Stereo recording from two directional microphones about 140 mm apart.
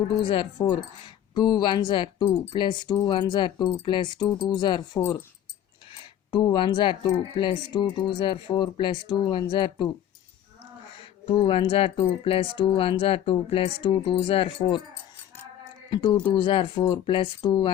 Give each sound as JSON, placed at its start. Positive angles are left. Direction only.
{"t": 0.3, "sound": "speech", "side_deg": 35}
{"t": 6.3, "sound": "speech", "side_deg": 35}
{"t": 10.9, "sound": "speech", "side_deg": 40}
{"t": 15.9, "sound": "speech", "side_deg": 35}